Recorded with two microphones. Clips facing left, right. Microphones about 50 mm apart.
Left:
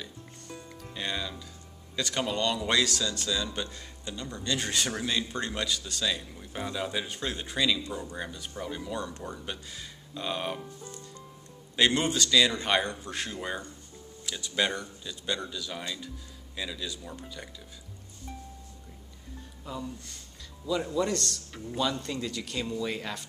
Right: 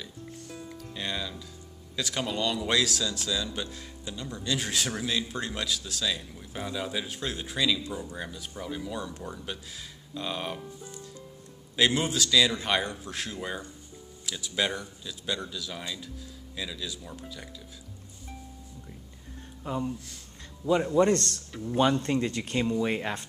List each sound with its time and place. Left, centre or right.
0.0 s music: centre
2.0 s a man's voice: centre
10.8 s music: centre
11.7 s a man's voice: centre
19.6 s speech: right